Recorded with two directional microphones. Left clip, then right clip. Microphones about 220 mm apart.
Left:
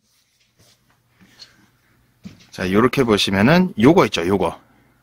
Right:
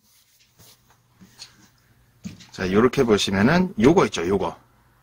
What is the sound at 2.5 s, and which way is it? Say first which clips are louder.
Speech: left 2 dB; 45° left (ahead or behind).